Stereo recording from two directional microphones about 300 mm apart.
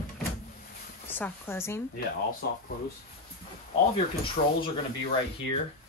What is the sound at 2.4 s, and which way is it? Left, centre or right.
Speech, left.